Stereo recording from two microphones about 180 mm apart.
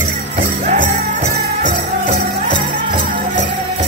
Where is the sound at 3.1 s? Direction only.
45° right (ahead or behind).